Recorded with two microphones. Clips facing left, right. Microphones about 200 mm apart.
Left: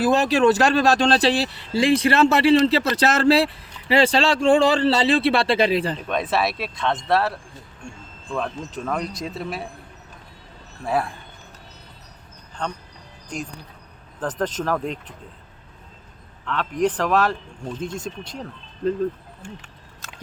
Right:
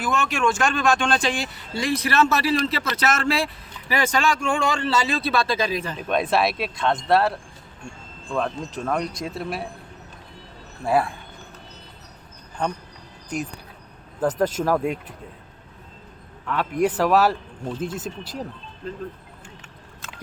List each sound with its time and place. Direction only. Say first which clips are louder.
0.0 s speech: left 6 dB; 35° left (ahead or behind)
6.1 s speech: right 6 dB; centre (ahead or behind)
10.8 s speech: right 2 dB; centre (ahead or behind)
14.2 s speech: right 4 dB; 10° right (ahead or behind)
16.5 s speech: even; 10° right (ahead or behind)